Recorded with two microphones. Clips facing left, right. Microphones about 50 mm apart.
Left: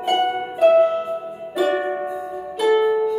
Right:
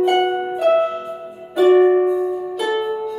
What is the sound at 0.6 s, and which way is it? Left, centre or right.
Harp, right.